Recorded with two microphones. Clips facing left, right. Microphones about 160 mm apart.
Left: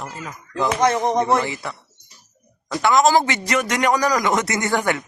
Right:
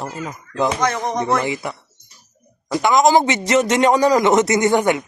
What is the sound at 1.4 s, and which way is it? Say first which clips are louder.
A man's voice: right 4 dB; 15° right (ahead or behind).